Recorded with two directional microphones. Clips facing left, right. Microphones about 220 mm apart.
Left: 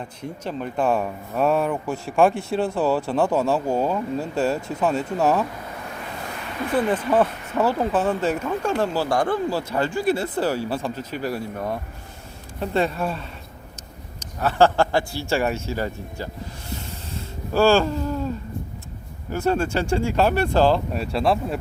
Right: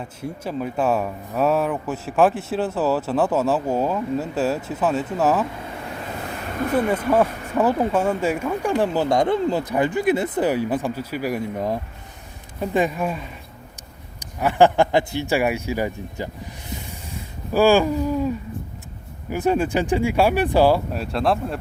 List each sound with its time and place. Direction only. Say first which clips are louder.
0.0 s speech: right 1 dB; 5° right (ahead or behind)
6.5 s a sound: right 4 dB; 45° right (ahead or behind)
6.7 s speech: right 1 dB; 10° right (ahead or behind)
17.2 s a sound: right 1 dB; 15° right (ahead or behind)
19.3 s speech: right 2 dB; 15° right (ahead or behind)
20.9 s speech: even; centre (ahead or behind)